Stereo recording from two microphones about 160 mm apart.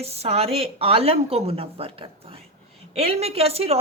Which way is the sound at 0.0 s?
40° right (ahead or behind).